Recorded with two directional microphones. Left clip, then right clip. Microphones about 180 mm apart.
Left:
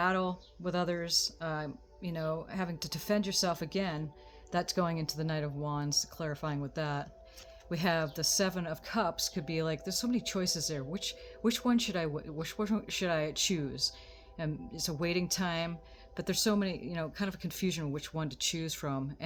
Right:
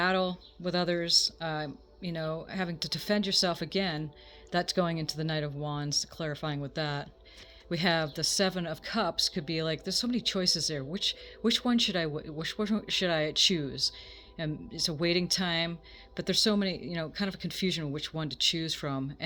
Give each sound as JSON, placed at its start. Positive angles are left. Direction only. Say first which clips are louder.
{"t": 0.0, "sound": "speech", "louder": "right 3 dB", "side_deg": -25}